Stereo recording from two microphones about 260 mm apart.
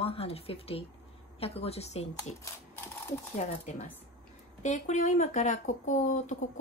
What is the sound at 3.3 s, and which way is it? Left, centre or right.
Speech, left.